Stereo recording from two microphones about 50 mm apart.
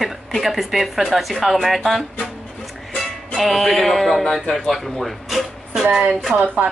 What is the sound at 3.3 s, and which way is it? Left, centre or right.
Speech, centre.